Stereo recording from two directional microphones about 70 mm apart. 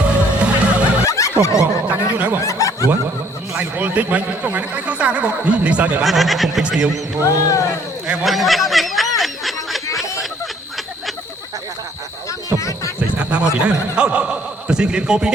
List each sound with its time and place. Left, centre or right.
0.0 s music: centre
1.0 s snicker: left
1.9 s a sound: right
2.4 s snicker: left
3.6 s speech: right
6.0 s speech: centre
6.6 s speech: centre
7.3 s speech: left
8.2 s snicker: centre
9.9 s a sound: centre
12.5 s music: left
13.0 s a sound: right
13.7 s a man's voice: centre